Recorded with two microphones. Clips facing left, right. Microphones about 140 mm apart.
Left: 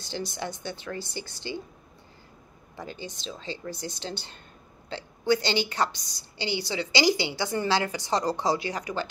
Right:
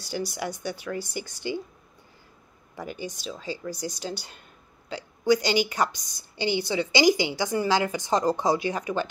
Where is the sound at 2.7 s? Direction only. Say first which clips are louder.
Right 4 dB; 15° right (ahead or behind).